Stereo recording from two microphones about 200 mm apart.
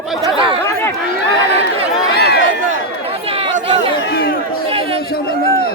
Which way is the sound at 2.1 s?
55° left (ahead or behind).